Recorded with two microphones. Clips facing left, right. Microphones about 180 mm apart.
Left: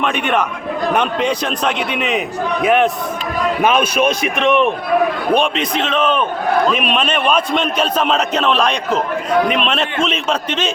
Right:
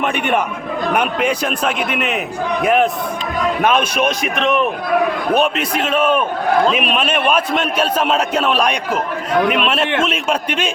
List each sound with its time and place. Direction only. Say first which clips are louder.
0.0 s a man's voice: even; 10° right (ahead or behind)